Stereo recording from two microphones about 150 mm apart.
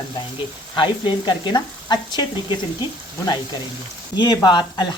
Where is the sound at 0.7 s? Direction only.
30° left (ahead or behind).